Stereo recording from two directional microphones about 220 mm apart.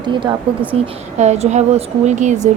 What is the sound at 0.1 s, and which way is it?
A woman's voice, 20° right (ahead or behind).